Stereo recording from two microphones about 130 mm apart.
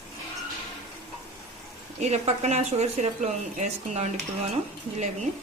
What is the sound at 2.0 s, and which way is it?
A woman's voice, 60° right (ahead or behind).